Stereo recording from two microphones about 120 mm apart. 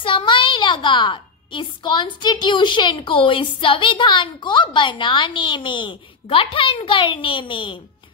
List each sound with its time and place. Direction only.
0.0 s a woman's voice: 45° left (ahead or behind)